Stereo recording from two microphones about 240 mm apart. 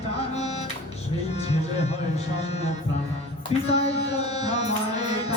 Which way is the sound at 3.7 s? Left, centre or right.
Left.